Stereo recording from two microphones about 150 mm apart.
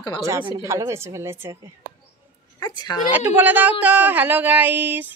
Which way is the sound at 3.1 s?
10° right (ahead or behind).